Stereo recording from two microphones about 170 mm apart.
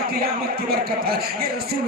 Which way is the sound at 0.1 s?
65° right (ahead or behind).